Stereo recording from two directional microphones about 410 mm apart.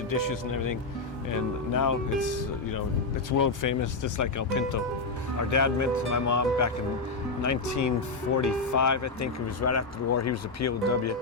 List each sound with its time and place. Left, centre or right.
0.1 s speech: left
3.3 s speech: left